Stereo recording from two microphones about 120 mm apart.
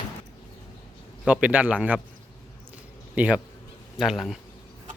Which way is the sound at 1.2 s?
10° right (ahead or behind).